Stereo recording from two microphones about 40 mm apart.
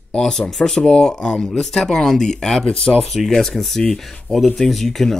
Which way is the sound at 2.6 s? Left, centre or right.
Left.